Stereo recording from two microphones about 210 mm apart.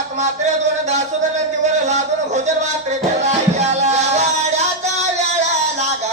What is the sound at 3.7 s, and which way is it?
Music, 35° right (ahead or behind).